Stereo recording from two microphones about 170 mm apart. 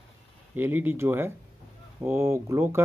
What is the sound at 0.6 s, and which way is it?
Speech, 10° right (ahead or behind).